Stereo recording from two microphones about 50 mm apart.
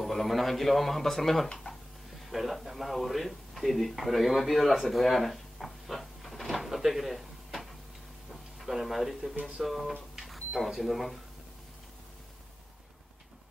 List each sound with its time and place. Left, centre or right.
0.0 s speech: centre
1.5 s a sound: centre
2.2 s speech: centre
8.3 s a sound: centre
9.3 s speech: right
9.6 s speech: centre